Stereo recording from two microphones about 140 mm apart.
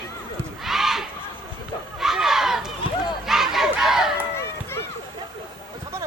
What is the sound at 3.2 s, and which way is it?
Battle cry, centre (ahead or behind).